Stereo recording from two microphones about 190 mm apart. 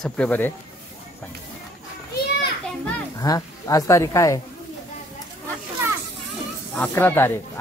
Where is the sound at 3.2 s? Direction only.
20° left (ahead or behind).